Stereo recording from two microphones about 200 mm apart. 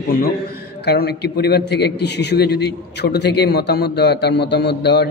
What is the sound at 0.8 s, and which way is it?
A man's voice, 55° left (ahead or behind).